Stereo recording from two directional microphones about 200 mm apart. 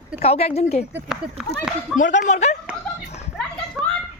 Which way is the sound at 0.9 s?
5° right (ahead or behind).